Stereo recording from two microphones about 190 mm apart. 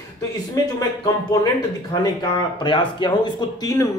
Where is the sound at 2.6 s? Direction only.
25° left (ahead or behind).